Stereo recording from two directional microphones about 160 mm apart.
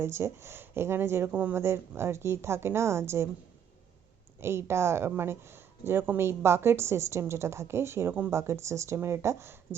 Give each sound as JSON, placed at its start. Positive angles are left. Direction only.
{"t": 0.0, "sound": "a woman's voice", "side_deg": -15}
{"t": 4.4, "sound": "a woman's voice", "side_deg": -15}